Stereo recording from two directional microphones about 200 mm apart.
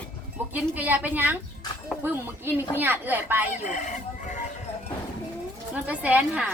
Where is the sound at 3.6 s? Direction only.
35° left (ahead or behind).